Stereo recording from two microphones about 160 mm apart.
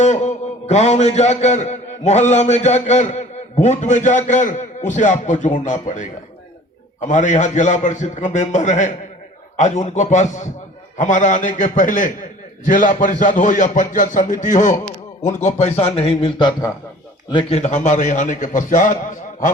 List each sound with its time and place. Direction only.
0.0 s a man's voice: 45° left (ahead or behind); by 16.7 s 25° left (ahead or behind)
17.3 s a man's voice: 45° left (ahead or behind)